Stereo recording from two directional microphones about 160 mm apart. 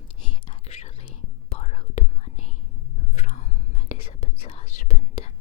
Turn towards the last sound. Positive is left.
turn(degrees=45)  # may be behind; listen again after turning